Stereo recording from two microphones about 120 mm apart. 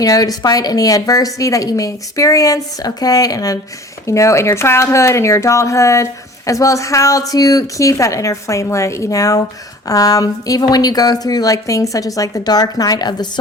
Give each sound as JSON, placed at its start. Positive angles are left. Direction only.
{"t": 0.0, "sound": "speech", "side_deg": 30}